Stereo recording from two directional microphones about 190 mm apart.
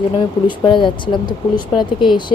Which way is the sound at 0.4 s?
25° left (ahead or behind).